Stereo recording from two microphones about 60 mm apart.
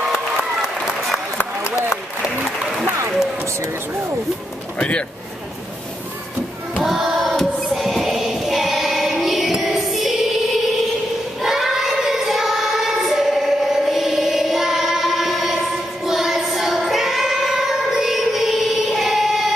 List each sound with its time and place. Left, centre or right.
4.7 s speech: left
6.7 s music: centre
11.4 s child singing: centre